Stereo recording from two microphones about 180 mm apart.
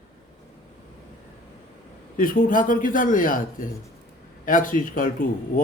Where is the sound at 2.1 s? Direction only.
50° left (ahead or behind).